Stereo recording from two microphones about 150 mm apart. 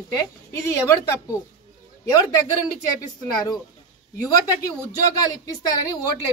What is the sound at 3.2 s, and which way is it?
Speech, 25° left (ahead or behind).